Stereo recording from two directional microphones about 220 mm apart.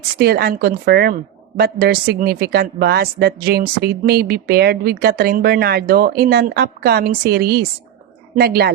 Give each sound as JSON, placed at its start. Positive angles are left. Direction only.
{"t": 0.2, "sound": "speech", "side_deg": -45}